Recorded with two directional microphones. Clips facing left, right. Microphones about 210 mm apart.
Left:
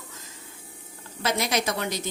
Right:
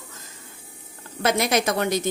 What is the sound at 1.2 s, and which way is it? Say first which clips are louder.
Speech: right 5 dB; 55° right (ahead or behind).